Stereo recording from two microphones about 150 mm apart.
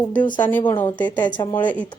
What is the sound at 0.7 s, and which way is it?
A woman's voice, 15° left (ahead or behind).